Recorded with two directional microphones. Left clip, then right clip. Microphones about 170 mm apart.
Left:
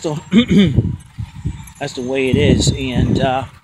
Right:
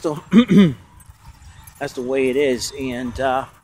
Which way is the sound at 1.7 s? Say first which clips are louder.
Left 1 dB; centre (ahead or behind).